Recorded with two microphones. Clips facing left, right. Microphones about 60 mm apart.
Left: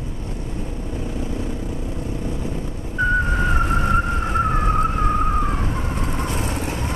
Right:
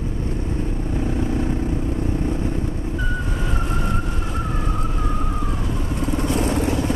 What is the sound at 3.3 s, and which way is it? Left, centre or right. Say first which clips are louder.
Vehicle: left 5 dB; left.